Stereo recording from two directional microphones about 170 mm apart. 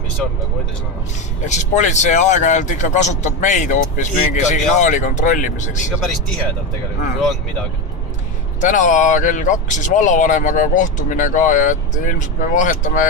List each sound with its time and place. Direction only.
1.4 s speech: 45° left (ahead or behind)
5.9 s speech: centre (ahead or behind)
8.5 s speech: 50° left (ahead or behind)